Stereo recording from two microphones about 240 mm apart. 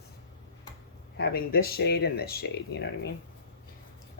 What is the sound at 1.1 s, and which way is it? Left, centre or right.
Speech, left.